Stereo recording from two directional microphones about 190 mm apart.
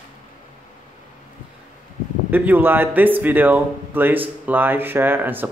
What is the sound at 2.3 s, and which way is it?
Speech, 10° right (ahead or behind).